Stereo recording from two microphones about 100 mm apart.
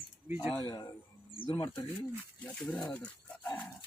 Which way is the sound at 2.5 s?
10° left (ahead or behind).